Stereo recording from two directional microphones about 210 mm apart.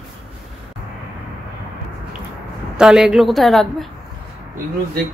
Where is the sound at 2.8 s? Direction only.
5° right (ahead or behind).